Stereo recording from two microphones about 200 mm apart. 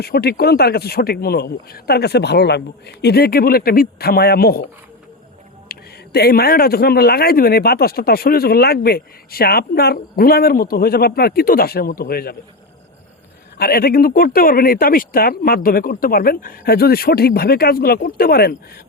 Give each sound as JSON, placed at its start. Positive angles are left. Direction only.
{"t": 0.0, "sound": "a man's voice", "side_deg": 50}
{"t": 5.7, "sound": "a sound", "side_deg": 50}
{"t": 6.1, "sound": "a man's voice", "side_deg": 50}
{"t": 13.6, "sound": "a man's voice", "side_deg": 50}